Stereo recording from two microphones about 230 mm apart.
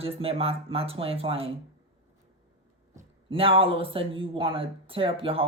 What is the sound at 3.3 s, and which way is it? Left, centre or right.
Speech, right.